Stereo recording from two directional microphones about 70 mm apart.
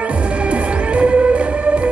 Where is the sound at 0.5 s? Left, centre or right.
Centre.